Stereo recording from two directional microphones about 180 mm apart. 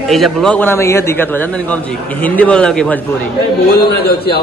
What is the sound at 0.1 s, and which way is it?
A man's voice, centre (ahead or behind).